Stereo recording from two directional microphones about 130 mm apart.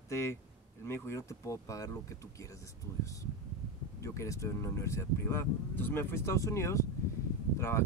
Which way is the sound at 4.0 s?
20° left (ahead or behind).